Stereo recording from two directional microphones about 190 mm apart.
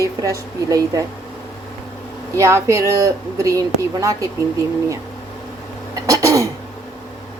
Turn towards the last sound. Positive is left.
turn(degrees=-15)  # may be behind; listen again after turning